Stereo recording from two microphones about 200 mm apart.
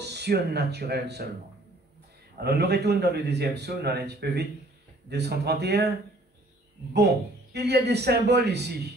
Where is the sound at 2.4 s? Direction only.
55° right (ahead or behind).